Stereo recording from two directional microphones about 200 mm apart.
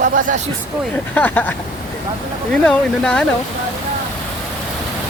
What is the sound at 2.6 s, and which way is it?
Speech, 5° left (ahead or behind).